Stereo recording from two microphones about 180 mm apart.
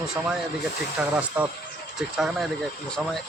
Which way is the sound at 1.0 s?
5° right (ahead or behind).